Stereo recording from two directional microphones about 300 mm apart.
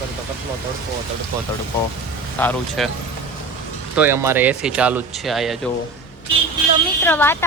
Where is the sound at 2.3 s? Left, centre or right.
Centre.